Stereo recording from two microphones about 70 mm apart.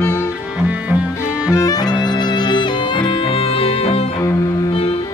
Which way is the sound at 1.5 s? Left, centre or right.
Left.